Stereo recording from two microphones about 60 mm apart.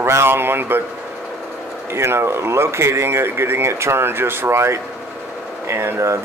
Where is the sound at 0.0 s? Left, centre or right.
Right.